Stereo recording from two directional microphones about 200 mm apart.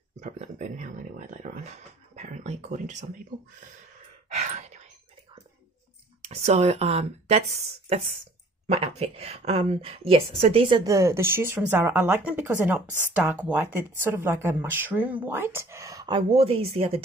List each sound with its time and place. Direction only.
0.2 s speech: 35° right (ahead or behind)
4.4 s sigh: 35° right (ahead or behind)
6.2 s speech: 30° right (ahead or behind)